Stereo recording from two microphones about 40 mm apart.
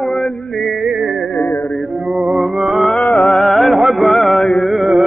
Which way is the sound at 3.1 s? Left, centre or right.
Centre.